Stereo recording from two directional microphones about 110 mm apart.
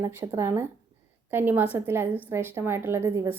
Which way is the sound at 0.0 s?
20° right (ahead or behind).